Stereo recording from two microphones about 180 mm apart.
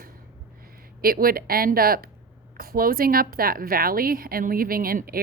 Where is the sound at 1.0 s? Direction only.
55° right (ahead or behind).